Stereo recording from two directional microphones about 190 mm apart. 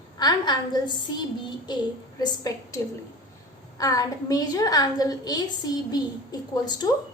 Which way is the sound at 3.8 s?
20° left (ahead or behind).